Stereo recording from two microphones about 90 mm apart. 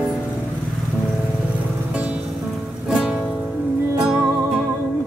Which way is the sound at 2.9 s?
10° right (ahead or behind).